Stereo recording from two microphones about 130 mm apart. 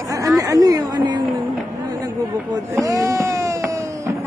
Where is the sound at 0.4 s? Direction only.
25° right (ahead or behind).